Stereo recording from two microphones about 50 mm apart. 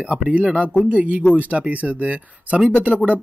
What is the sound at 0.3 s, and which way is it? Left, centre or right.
Speech, right.